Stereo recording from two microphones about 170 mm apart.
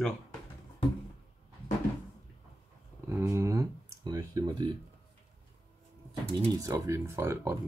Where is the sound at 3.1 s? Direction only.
15° right (ahead or behind).